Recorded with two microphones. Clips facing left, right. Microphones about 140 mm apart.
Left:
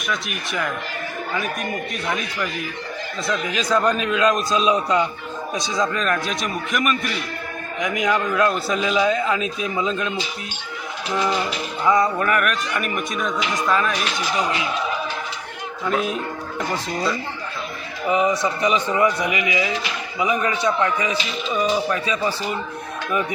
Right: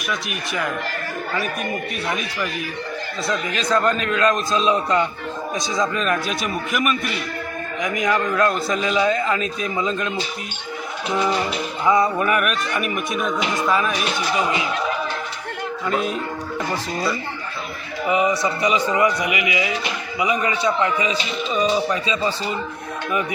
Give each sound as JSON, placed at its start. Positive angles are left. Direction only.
{"t": 0.1, "sound": "a man's voice", "side_deg": 0}
{"t": 2.0, "sound": "a man's voice", "side_deg": -5}
{"t": 11.9, "sound": "a man's voice", "side_deg": -10}
{"t": 18.1, "sound": "a man's voice", "side_deg": -15}